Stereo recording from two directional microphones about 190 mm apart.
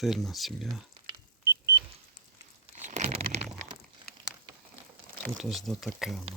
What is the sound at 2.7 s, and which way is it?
Crunch, 40° right (ahead or behind).